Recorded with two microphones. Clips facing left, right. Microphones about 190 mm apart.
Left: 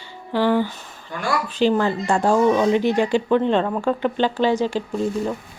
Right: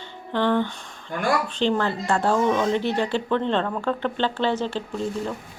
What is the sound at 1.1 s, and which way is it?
Speech, 50° right (ahead or behind).